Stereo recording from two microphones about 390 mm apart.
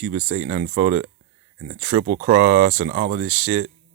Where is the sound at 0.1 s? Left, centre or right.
Right.